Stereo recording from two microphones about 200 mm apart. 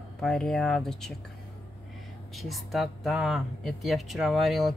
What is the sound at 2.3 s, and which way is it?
Speech, centre (ahead or behind).